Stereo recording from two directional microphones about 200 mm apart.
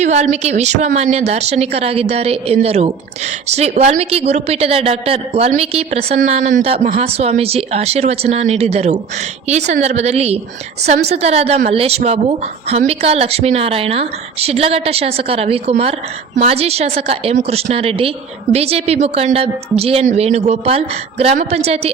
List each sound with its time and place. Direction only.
0.0 s a woman's voice: 35° right (ahead or behind)